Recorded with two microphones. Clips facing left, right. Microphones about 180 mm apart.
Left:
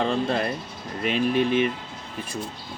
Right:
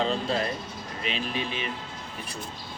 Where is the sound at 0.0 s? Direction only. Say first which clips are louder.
Left 3 dB; 55° left (ahead or behind).